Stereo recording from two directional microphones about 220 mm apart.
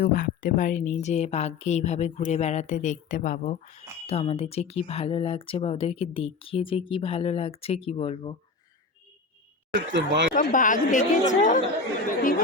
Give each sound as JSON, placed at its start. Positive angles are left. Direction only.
{"t": 0.0, "sound": "speech", "side_deg": 40}
{"t": 9.9, "sound": "speech", "side_deg": -55}
{"t": 10.3, "sound": "speech", "side_deg": 35}